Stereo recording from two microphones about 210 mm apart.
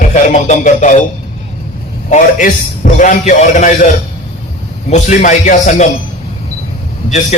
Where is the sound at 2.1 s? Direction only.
40° left (ahead or behind).